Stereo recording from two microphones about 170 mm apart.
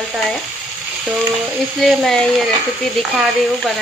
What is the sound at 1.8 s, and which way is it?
Speech, centre (ahead or behind).